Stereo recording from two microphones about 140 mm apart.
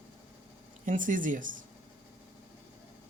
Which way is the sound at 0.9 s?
70° right (ahead or behind).